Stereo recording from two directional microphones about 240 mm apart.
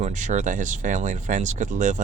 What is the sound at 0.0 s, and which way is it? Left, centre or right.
Speech, right.